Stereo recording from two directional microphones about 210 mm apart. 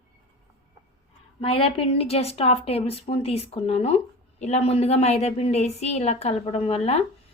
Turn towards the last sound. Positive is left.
turn(degrees=30)  # may be behind; listen again after turning